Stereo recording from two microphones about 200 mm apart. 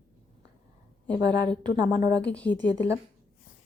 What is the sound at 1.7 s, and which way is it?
Speech, 20° right (ahead or behind).